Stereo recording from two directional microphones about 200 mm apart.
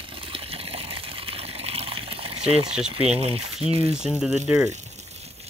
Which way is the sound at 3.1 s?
30° right (ahead or behind).